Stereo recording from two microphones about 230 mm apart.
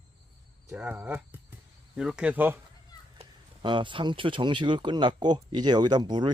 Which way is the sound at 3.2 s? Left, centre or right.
Right.